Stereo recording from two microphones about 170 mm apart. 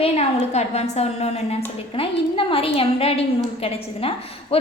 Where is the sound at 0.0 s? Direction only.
40° left (ahead or behind).